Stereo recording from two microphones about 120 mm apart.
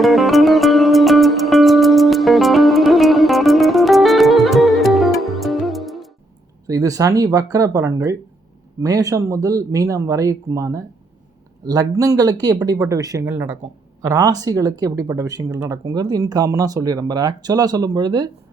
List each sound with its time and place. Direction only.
0.0 s music: centre (ahead or behind)
6.7 s speech: 30° right (ahead or behind)